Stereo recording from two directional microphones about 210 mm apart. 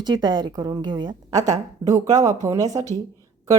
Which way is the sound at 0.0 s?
20° right (ahead or behind).